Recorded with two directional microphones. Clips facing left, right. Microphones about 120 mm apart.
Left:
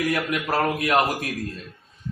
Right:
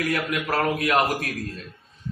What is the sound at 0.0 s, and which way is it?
Speech, 20° left (ahead or behind).